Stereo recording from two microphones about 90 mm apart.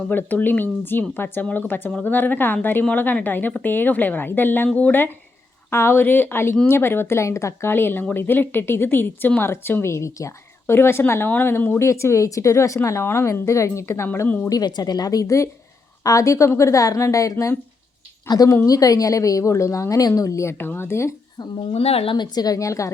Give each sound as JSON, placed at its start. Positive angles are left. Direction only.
{"t": 0.1, "sound": "speech", "side_deg": 20}
{"t": 14.3, "sound": "speech", "side_deg": 20}
{"t": 14.5, "sound": "a woman's voice", "side_deg": 50}
{"t": 21.6, "sound": "speech", "side_deg": 90}
{"t": 22.2, "sound": "a woman's voice", "side_deg": 45}